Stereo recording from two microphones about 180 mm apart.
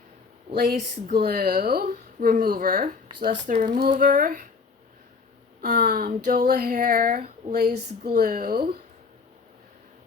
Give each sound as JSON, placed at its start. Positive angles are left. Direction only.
{"t": 0.5, "sound": "a woman's voice", "side_deg": -50}
{"t": 5.6, "sound": "speech", "side_deg": -55}